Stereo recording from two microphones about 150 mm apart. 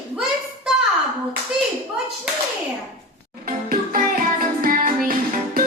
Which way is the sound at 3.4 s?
65° right (ahead or behind).